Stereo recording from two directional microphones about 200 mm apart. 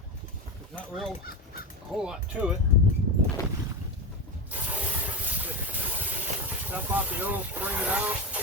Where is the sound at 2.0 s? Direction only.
5° right (ahead or behind).